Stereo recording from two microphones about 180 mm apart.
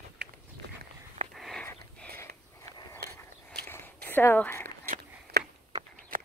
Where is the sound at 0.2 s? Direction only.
65° right (ahead or behind).